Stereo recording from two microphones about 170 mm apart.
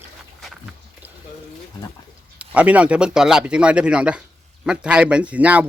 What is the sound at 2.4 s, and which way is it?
Speech, 10° right (ahead or behind).